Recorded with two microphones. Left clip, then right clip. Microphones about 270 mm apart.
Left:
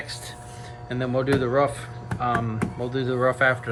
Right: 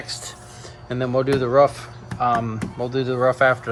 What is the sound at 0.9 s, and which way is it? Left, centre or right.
Speech, right.